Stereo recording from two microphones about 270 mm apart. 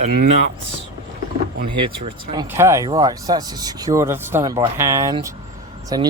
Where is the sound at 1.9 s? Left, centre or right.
Centre.